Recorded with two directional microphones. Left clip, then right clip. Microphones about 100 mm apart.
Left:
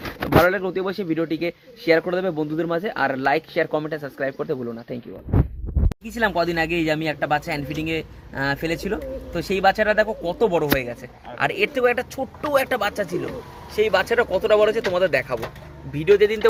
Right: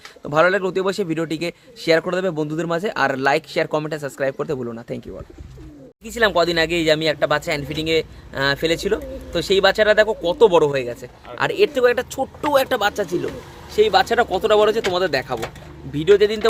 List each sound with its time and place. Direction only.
0.4 s a man's voice: 30° right (ahead or behind)
6.1 s a man's voice: 20° right (ahead or behind)